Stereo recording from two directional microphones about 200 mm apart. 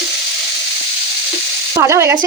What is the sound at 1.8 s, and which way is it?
Sizzle, 15° right (ahead or behind).